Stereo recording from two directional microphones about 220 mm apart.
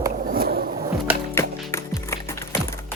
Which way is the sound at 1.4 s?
15° left (ahead or behind).